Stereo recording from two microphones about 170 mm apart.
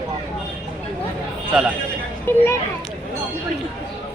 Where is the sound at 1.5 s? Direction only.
5° right (ahead or behind).